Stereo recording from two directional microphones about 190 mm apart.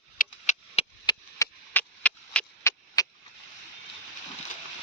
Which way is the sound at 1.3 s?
15° left (ahead or behind).